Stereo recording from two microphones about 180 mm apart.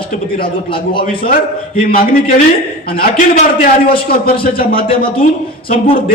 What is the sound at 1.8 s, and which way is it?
A man's voice, 55° left (ahead or behind).